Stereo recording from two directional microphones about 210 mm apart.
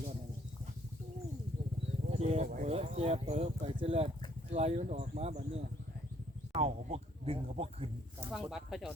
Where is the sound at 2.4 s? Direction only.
40° right (ahead or behind).